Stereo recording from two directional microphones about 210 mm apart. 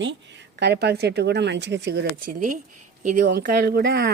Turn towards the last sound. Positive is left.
turn(degrees=-50)  # may be behind; listen again after turning